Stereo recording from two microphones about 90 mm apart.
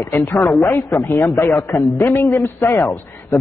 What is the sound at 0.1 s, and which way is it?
A woman's voice, 30° left (ahead or behind).